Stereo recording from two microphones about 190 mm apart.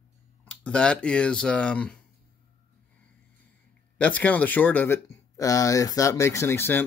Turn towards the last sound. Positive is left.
turn(degrees=10)  # may be behind; listen again after turning